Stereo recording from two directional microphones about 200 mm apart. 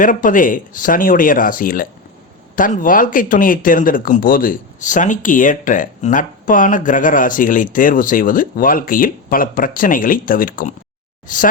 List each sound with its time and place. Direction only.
0.0 s speech: 40° left (ahead or behind)